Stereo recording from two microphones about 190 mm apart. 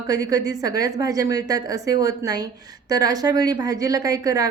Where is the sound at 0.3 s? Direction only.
20° right (ahead or behind).